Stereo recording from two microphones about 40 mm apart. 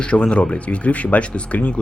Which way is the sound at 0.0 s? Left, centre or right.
Left.